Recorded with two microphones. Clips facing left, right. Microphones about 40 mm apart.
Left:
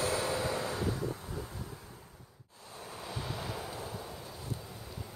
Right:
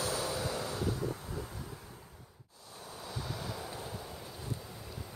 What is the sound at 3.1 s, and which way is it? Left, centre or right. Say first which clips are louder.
Waves: left 1 dB; left.